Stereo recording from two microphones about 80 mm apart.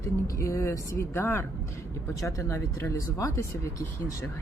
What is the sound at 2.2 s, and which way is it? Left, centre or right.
Speech, left.